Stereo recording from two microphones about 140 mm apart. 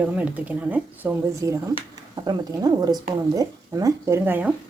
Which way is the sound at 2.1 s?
30° right (ahead or behind).